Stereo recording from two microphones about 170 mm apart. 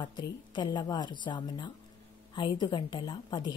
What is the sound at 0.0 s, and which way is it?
A woman's voice, 25° left (ahead or behind).